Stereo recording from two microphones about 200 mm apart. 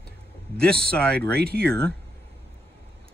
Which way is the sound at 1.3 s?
50° right (ahead or behind).